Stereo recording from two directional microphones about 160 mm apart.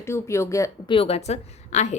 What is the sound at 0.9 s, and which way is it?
A woman's voice, 40° left (ahead or behind).